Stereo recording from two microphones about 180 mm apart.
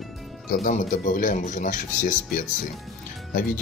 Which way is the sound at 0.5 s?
45° left (ahead or behind).